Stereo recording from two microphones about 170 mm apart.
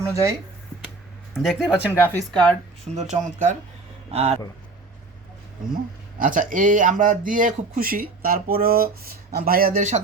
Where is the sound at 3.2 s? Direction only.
50° right (ahead or behind).